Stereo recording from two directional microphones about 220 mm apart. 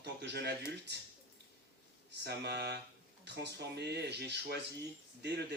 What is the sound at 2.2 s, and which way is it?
Speech, 50° right (ahead or behind).